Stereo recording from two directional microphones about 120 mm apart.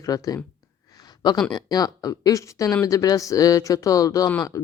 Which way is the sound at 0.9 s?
35° left (ahead or behind).